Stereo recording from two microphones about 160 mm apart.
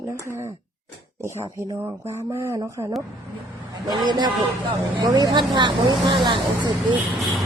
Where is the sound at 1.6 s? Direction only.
15° right (ahead or behind).